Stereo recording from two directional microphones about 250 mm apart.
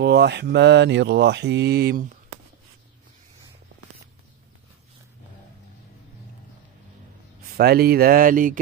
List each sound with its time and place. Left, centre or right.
0.0 s speech: right
7.5 s speech: right